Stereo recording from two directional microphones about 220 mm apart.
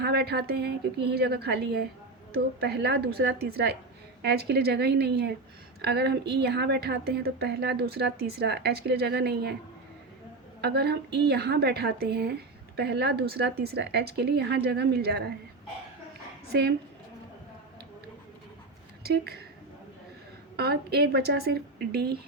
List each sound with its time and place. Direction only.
0.0 s a woman's voice: 45° right (ahead or behind)
10.6 s a woman's voice: 45° right (ahead or behind)
16.5 s a woman's voice: 45° right (ahead or behind)
19.0 s a woman's voice: 45° right (ahead or behind)
20.6 s a woman's voice: 45° right (ahead or behind)